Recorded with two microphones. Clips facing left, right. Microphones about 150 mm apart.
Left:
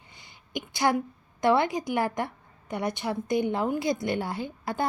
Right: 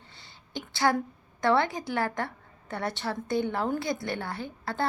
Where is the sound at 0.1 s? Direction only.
15° left (ahead or behind).